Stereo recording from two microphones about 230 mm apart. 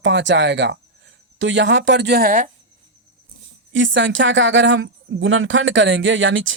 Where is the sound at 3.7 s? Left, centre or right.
Right.